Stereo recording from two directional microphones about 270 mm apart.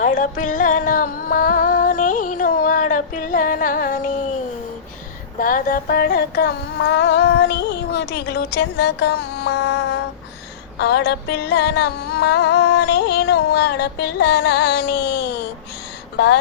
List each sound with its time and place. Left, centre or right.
0.0 s music: left
5.4 s music: left